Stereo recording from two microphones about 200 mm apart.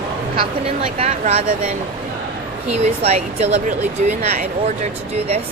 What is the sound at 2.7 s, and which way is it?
Speech, 30° right (ahead or behind).